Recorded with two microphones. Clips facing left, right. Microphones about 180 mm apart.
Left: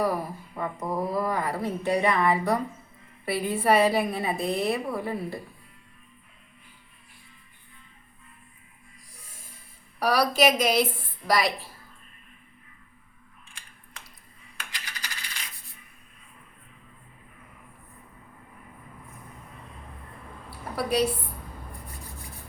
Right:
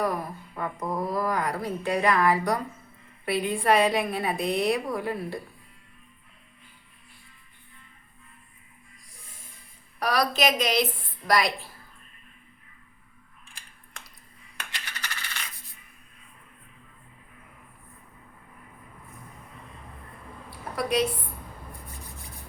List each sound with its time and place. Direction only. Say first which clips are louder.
0.0 s a woman's voice: left 1 dB; 5° left (ahead or behind)
10.0 s a woman's voice: left 3 dB; 10° left (ahead or behind)
14.7 s coin: right 2 dB; 65° right (ahead or behind)
20.7 s a woman's voice: left 1 dB; 5° left (ahead or behind)